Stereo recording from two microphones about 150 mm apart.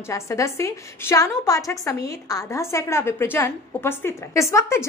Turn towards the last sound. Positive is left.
turn(degrees=20)  # may be behind; listen again after turning